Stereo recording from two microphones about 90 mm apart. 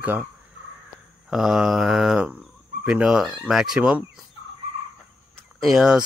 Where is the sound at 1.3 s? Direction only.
5° right (ahead or behind).